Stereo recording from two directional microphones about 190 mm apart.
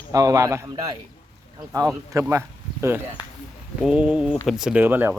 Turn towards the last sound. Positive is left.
turn(degrees=-10)  # may be behind; listen again after turning